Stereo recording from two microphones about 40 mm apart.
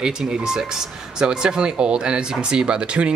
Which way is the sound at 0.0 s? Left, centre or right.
Centre.